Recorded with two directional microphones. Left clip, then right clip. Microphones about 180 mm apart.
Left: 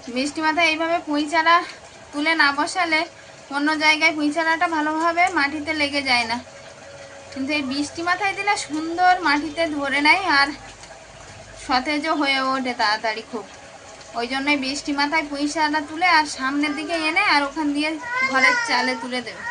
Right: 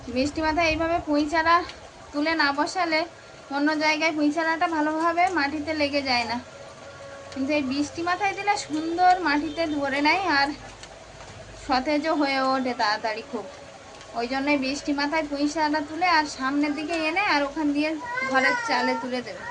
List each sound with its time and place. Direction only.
0.1 s a child's voice: 15° left (ahead or behind)
7.4 s a woman's voice: 20° left (ahead or behind)
11.7 s a woman's voice: 20° left (ahead or behind)